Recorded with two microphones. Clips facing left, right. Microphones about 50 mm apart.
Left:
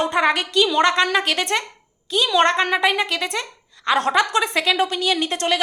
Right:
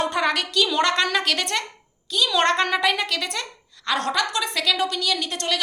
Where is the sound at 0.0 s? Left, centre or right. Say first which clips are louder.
Left 4 dB; centre.